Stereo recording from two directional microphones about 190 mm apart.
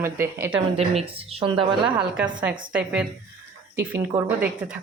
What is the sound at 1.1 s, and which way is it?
Speech, 30° right (ahead or behind).